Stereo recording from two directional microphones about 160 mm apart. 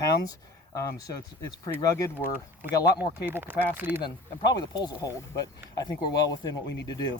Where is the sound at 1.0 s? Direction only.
20° left (ahead or behind).